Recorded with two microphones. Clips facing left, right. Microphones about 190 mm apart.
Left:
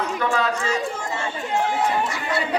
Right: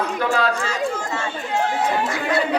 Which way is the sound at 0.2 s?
35° right (ahead or behind).